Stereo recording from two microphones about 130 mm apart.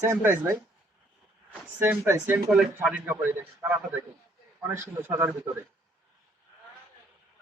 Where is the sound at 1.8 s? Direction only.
15° right (ahead or behind).